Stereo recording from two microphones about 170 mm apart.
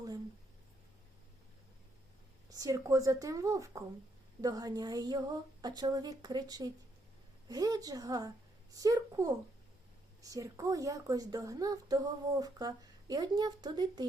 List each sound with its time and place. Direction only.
2.5 s a woman's voice: 20° right (ahead or behind)